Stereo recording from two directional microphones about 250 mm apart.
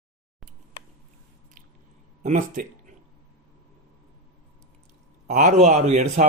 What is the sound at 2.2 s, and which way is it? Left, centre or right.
Speech, right.